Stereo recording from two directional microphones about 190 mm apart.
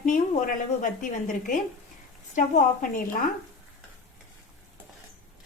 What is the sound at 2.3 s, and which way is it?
A woman's voice, 45° left (ahead or behind).